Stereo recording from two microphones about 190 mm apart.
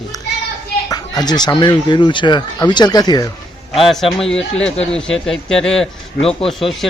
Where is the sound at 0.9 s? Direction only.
20° left (ahead or behind).